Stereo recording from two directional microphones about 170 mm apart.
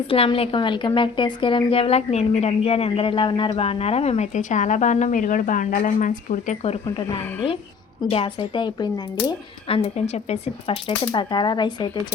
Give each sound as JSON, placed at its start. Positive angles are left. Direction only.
{"t": 0.1, "sound": "a woman's voice", "side_deg": 35}